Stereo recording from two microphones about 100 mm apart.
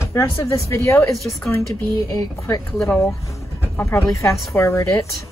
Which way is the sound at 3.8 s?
30° left (ahead or behind).